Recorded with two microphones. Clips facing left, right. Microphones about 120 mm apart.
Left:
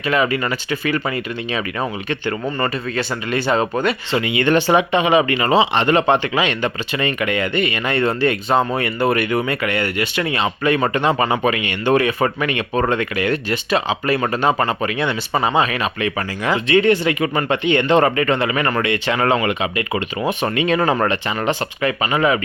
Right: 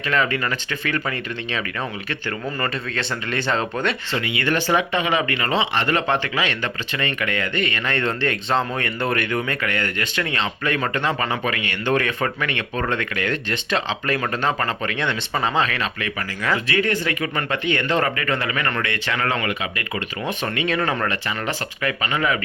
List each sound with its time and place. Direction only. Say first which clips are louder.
0.1 s speech: left 4 dB; 15° left (ahead or behind)
2.6 s speech: left 5 dB; 5° left (ahead or behind)
4.1 s speech: left 9 dB; 20° left (ahead or behind)
11.2 s speech: left 6 dB; 30° left (ahead or behind)
11.5 s speech: left 5 dB; 15° left (ahead or behind)